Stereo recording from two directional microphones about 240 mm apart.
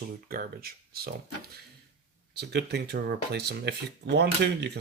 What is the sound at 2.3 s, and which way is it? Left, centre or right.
Speech, right.